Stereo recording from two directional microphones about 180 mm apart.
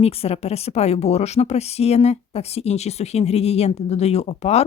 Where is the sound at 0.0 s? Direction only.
35° left (ahead or behind).